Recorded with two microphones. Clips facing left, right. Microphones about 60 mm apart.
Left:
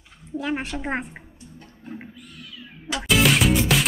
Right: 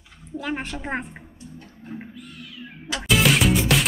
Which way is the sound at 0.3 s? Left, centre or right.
Centre.